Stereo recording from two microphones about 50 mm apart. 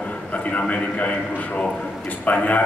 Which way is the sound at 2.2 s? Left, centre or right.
Left.